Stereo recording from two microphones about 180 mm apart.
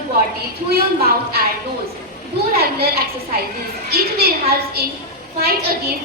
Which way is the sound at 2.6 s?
60° right (ahead or behind).